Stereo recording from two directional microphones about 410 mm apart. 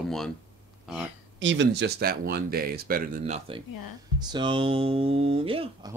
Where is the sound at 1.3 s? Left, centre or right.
Right.